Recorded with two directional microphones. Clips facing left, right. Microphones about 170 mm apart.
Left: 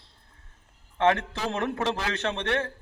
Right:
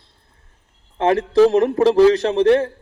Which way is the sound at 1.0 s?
35° right (ahead or behind).